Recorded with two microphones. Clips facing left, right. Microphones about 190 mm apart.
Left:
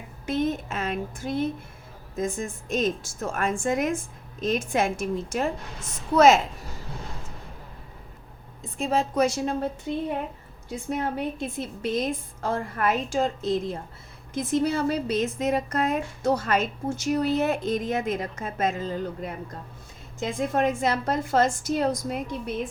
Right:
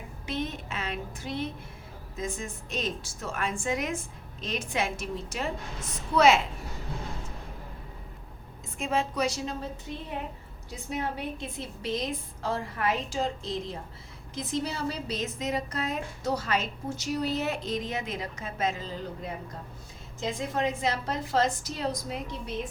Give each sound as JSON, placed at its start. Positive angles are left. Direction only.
{"t": 0.3, "sound": "a woman's voice", "side_deg": 50}
{"t": 8.8, "sound": "a woman's voice", "side_deg": 40}
{"t": 9.9, "sound": "a woman's voice", "side_deg": 65}
{"t": 10.7, "sound": "a woman's voice", "side_deg": 50}
{"t": 20.1, "sound": "a woman's voice", "side_deg": 55}